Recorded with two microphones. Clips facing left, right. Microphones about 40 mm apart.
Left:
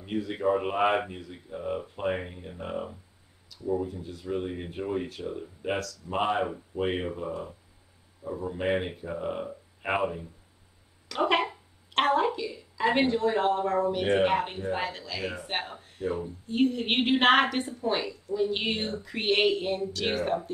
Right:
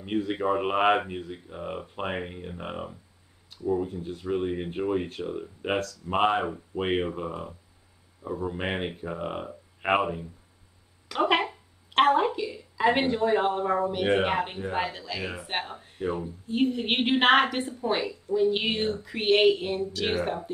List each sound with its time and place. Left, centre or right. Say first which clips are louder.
0.0 s speech: right 1 dB; right
11.1 s speech: right 2 dB; centre
12.1 s a sound: right 2 dB; centre
13.6 s a woman's voice: even; centre